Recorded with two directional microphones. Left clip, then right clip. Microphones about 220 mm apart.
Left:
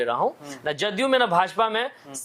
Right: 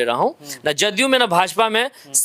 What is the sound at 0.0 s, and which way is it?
Speech, 45° right (ahead or behind).